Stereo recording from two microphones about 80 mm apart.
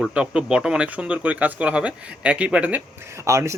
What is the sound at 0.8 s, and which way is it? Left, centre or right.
Speech, centre.